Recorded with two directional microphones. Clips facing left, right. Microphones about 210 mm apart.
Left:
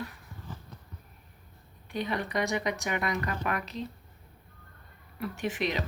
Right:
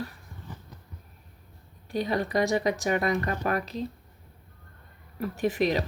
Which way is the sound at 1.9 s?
40° right (ahead or behind).